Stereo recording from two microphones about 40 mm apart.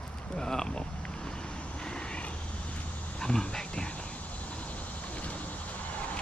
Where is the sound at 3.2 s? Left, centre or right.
Centre.